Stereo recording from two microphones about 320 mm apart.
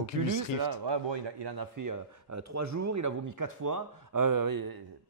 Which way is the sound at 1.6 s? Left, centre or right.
Right.